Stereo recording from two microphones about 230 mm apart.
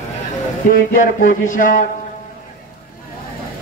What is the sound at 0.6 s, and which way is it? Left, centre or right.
A man's voice, left.